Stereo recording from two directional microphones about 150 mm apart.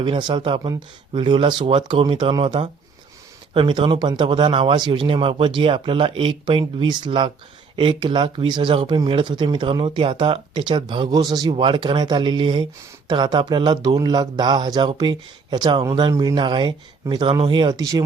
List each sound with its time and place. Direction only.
0.0 s speech: 30° right (ahead or behind)